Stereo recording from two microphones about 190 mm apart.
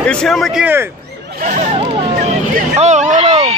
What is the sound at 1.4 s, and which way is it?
Hubbub, 40° right (ahead or behind).